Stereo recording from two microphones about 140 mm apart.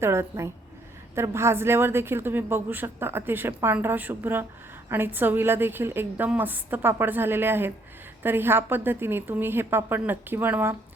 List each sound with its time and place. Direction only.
0.0 s a woman's voice: 20° right (ahead or behind)